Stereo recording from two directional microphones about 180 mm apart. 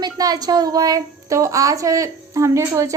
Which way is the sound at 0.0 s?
20° right (ahead or behind).